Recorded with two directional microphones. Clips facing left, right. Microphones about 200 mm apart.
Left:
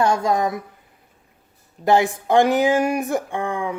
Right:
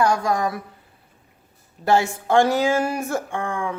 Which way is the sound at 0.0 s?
25° left (ahead or behind).